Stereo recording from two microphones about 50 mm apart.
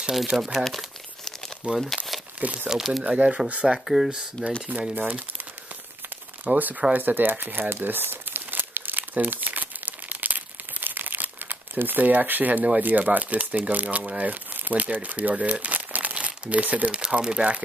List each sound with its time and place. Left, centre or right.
0.1 s speech: centre
1.6 s speech: right
2.7 s speech: centre
3.0 s speech: right
3.6 s speech: centre
4.4 s speech: centre
4.9 s speech: right
6.4 s speech: right
7.0 s crumpling: right
12.6 s speech: right